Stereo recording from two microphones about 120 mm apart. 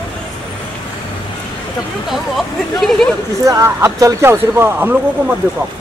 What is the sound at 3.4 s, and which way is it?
Speech, 25° right (ahead or behind).